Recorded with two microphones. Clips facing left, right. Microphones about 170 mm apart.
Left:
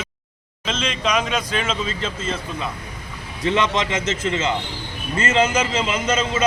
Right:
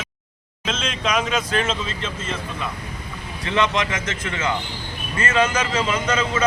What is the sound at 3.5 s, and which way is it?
A man's voice, 20° left (ahead or behind).